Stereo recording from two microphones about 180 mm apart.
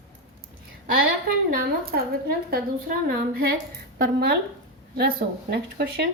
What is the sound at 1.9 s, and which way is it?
Speech, 55° right (ahead or behind).